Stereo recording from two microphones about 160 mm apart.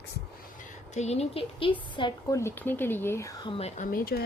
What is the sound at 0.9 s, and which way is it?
Speech, 45° left (ahead or behind).